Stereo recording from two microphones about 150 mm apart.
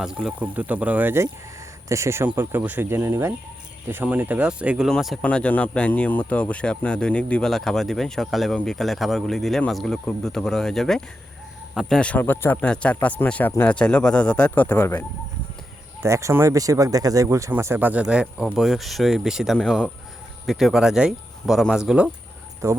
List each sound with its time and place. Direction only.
0.0 s speech: 5° right (ahead or behind); by 15.0 s 10° left (ahead or behind)
16.0 s speech: 20° right (ahead or behind)
22.6 s speech: 20° right (ahead or behind)